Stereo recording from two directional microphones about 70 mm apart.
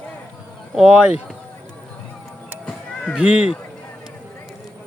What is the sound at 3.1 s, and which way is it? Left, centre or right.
Speech, centre.